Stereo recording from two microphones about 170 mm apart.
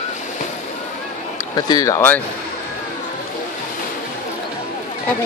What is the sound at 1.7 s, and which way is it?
Speech, 20° left (ahead or behind).